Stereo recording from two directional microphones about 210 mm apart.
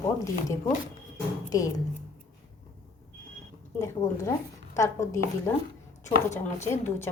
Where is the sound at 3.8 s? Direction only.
15° left (ahead or behind).